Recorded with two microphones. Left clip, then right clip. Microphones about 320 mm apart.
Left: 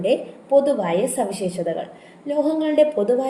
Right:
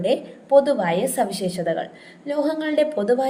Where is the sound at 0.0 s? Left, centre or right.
Right.